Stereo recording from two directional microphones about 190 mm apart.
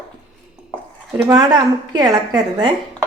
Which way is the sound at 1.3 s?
20° right (ahead or behind).